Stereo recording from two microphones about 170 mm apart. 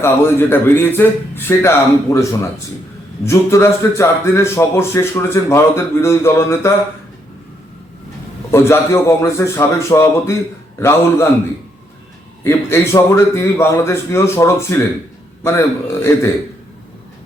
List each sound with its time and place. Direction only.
0.0 s a man's voice: 15° left (ahead or behind)
8.5 s a man's voice: 15° left (ahead or behind)
12.4 s a man's voice: 15° left (ahead or behind)